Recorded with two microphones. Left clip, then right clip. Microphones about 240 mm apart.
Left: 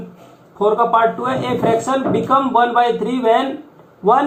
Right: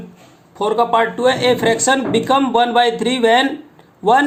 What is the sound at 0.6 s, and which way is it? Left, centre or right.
Speech, right.